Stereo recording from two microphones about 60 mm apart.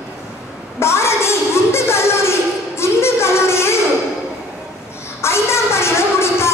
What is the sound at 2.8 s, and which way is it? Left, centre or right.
Music, left.